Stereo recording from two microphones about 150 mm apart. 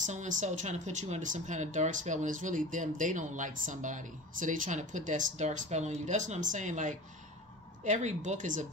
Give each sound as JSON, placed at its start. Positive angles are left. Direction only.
{"t": 0.0, "sound": "speech", "side_deg": -55}